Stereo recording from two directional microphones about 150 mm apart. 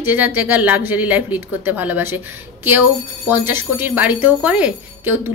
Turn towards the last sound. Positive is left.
turn(degrees=-15)  # may be behind; listen again after turning